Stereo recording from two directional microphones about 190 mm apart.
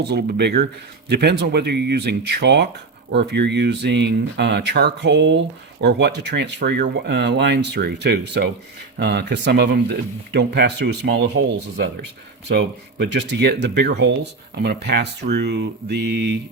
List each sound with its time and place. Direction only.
0.0 s speech: 55° right (ahead or behind)
12.5 s speech: 65° right (ahead or behind)